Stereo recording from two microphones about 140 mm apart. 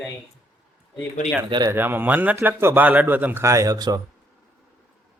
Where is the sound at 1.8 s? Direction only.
15° right (ahead or behind).